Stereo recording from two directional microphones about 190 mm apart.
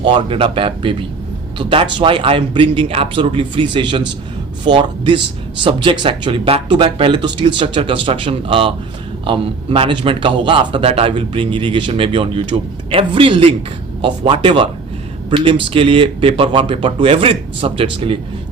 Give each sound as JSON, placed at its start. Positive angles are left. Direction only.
{"t": 0.0, "sound": "a man's voice", "side_deg": -25}
{"t": 15.7, "sound": "a man's voice", "side_deg": -30}